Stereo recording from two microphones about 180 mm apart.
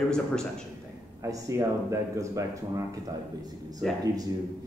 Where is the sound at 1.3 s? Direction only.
15° right (ahead or behind).